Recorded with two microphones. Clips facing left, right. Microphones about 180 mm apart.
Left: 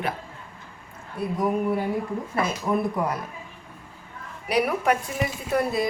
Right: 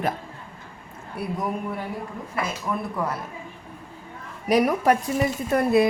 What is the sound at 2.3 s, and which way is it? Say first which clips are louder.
Speech: left 2 dB; 30° left (ahead or behind).